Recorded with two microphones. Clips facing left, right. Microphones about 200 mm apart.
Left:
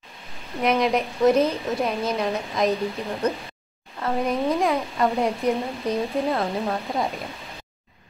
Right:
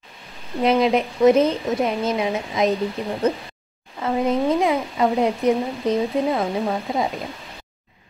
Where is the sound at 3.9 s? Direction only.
15° right (ahead or behind).